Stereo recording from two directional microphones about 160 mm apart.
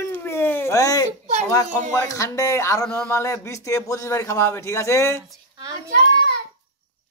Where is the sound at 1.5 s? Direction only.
20° left (ahead or behind).